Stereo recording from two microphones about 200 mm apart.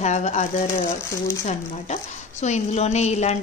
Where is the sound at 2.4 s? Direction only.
35° left (ahead or behind).